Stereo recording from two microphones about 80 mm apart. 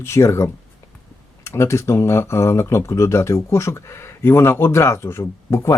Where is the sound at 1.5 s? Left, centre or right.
Left.